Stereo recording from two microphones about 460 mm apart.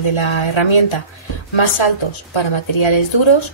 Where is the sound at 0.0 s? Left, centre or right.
Left.